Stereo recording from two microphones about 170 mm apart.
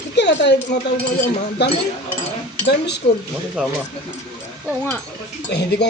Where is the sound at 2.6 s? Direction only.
90° left.